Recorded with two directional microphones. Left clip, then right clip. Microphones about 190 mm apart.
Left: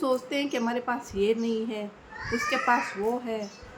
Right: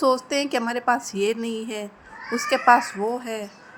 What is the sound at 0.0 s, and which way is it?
A woman's voice, 55° right (ahead or behind).